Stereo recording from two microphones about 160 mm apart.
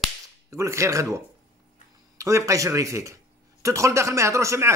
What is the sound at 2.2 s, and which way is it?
A man's voice, 20° right (ahead or behind).